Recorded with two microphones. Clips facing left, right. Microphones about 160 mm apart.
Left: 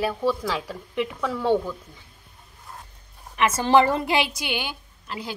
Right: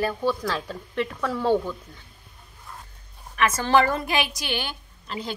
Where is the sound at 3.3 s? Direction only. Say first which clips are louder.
Left 2 dB; 25° left (ahead or behind).